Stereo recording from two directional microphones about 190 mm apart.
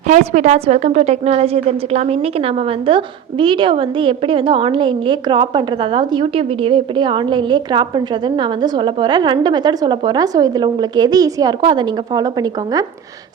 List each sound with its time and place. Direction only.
0.1 s a woman's voice: 40° right (ahead or behind); by 12.8 s 20° right (ahead or behind)